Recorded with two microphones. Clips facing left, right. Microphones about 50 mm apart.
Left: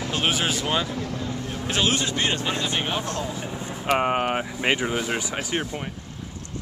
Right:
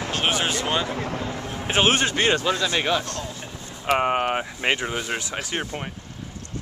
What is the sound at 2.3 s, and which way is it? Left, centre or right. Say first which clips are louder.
Speech: right 3 dB; right.